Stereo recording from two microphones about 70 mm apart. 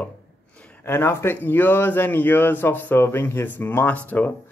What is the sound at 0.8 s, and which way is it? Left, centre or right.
Speech, left.